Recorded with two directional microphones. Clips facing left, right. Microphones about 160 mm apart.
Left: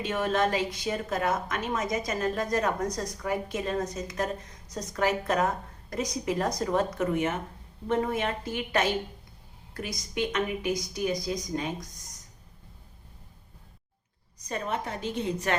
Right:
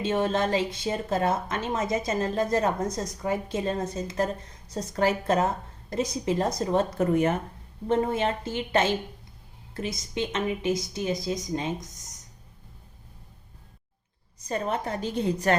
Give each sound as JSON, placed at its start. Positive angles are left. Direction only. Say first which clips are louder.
{"t": 0.0, "sound": "a woman's voice", "louder": "right 2 dB", "side_deg": -25}
{"t": 14.3, "sound": "a woman's voice", "louder": "right 3 dB", "side_deg": -30}